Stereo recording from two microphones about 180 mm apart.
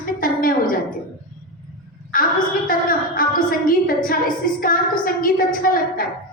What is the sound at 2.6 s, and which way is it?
A woman's voice, 50° left (ahead or behind).